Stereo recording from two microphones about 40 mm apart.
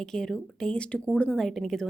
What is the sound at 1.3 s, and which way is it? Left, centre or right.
Speech, centre.